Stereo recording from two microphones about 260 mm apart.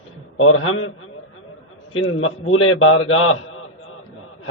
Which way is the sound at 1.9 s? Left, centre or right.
Left.